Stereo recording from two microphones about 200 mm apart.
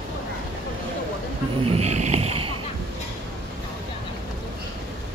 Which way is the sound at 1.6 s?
30° right (ahead or behind).